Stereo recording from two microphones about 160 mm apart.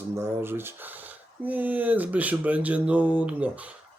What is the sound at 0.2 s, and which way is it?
Speech, 15° right (ahead or behind).